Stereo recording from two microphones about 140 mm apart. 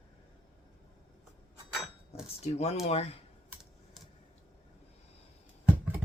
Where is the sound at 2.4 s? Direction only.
50° left (ahead or behind).